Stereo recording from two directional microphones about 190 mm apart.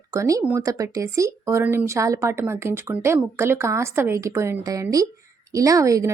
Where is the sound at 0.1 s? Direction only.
15° right (ahead or behind).